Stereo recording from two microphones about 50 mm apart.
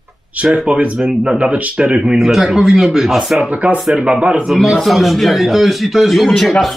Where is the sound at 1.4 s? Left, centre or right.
Right.